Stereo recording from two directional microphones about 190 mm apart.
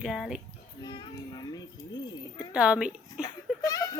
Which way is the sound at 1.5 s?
20° left (ahead or behind).